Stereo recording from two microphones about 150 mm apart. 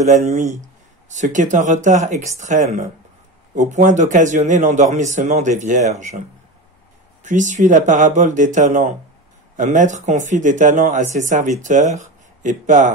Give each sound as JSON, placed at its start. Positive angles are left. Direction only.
{"t": 0.0, "sound": "a man's voice", "side_deg": -50}
{"t": 7.2, "sound": "a man's voice", "side_deg": -55}